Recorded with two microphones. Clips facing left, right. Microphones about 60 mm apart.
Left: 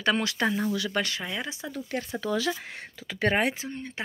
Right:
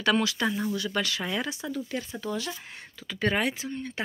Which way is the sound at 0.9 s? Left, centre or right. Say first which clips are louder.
Even; left.